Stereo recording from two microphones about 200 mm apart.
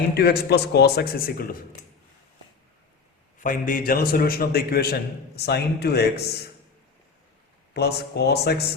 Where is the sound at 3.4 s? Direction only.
45° left (ahead or behind).